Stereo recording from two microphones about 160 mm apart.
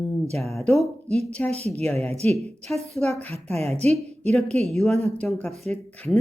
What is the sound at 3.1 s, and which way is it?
Speech, 10° left (ahead or behind).